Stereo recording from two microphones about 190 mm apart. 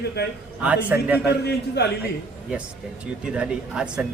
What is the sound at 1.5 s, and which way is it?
Speech, 60° left (ahead or behind).